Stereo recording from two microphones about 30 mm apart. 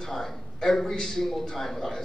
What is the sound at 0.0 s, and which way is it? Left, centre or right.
A man's voice, centre.